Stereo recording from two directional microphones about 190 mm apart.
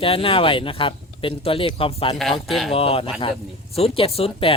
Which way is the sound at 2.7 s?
30° left (ahead or behind).